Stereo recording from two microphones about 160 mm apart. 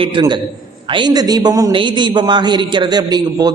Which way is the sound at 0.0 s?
30° right (ahead or behind).